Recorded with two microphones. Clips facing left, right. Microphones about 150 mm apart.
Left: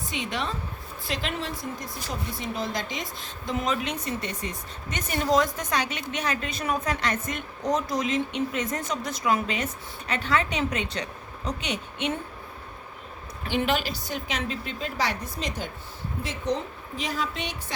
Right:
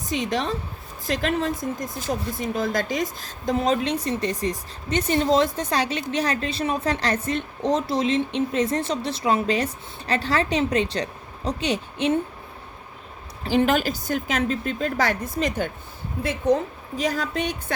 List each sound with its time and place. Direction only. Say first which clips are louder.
0.1 s speech: right 7 dB; 40° right (ahead or behind)
13.4 s a woman's voice: right 6 dB; 35° right (ahead or behind); by 16.6 s 55° right (ahead or behind)
17.0 s a woman's voice: right 6 dB; 45° right (ahead or behind)